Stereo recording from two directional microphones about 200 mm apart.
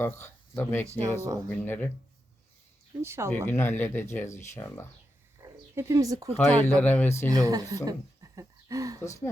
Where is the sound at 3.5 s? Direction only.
10° left (ahead or behind).